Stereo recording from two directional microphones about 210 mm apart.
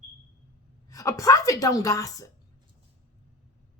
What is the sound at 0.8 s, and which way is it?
A woman's voice, 15° left (ahead or behind).